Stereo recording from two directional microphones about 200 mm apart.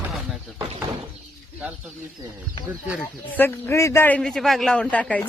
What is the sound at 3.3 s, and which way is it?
A man's voice, 10° left (ahead or behind).